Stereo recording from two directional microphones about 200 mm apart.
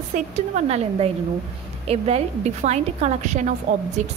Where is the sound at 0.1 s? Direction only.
35° right (ahead or behind).